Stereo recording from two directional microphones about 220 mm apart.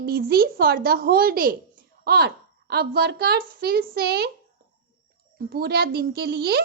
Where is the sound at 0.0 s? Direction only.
45° right (ahead or behind).